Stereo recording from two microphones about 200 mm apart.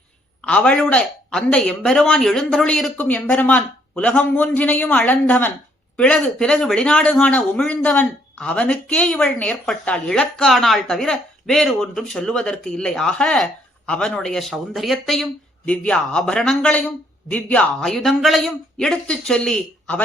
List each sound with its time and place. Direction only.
0.4 s speech: 5° left (ahead or behind)